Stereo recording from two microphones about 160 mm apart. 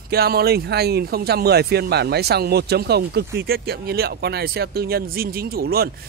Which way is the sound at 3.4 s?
75° right (ahead or behind).